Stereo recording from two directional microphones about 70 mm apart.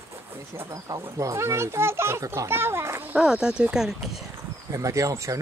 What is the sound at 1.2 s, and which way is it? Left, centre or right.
A child's voice, right.